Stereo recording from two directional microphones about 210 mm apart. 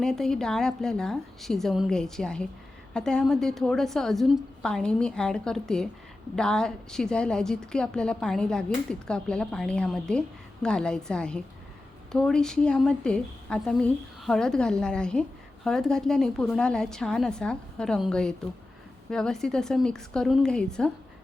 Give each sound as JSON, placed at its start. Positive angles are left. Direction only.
{"t": 0.0, "sound": "a woman's voice", "side_deg": 0}